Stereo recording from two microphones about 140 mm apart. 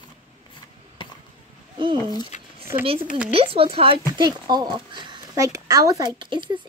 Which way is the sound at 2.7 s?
40° right (ahead or behind).